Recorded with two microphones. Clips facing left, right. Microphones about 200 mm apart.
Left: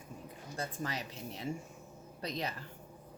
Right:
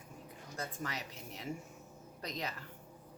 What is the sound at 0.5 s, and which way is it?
A woman's voice, 30° left (ahead or behind).